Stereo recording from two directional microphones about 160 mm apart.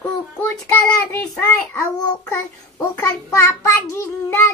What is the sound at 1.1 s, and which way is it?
A child's voice, 15° left (ahead or behind).